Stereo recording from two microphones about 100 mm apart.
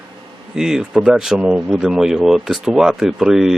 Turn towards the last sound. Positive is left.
turn(degrees=-5)  # may be behind; listen again after turning